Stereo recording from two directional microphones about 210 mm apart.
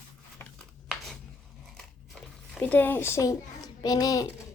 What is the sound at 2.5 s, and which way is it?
A child's voice, 5° left (ahead or behind).